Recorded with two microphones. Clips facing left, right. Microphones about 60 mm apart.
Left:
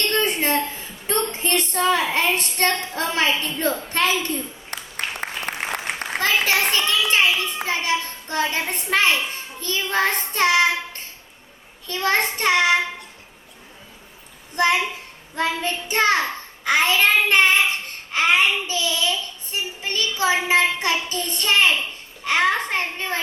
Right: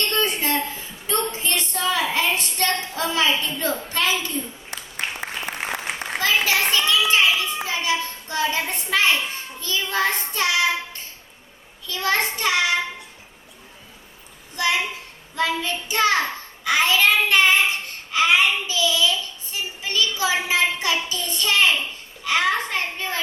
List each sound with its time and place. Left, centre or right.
0.1 s a sound: left
2.9 s a child's voice: left
5.5 s applause: centre
6.4 s a child's voice: left
6.8 s child singing: left
11.9 s a child's voice: left
14.5 s a child's voice: left